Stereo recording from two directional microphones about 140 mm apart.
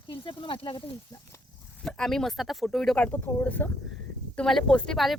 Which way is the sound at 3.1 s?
15° left (ahead or behind).